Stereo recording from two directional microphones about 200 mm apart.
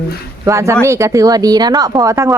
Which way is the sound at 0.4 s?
15° right (ahead or behind).